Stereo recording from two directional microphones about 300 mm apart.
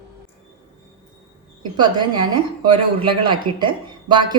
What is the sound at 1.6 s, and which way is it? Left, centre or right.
Speech, centre.